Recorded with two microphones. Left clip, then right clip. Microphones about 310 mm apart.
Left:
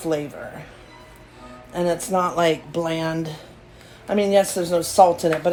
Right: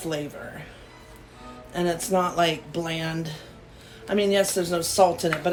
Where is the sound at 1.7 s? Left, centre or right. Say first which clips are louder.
Left 3 dB; centre.